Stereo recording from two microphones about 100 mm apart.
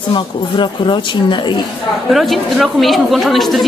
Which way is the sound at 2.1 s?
Centre (ahead or behind).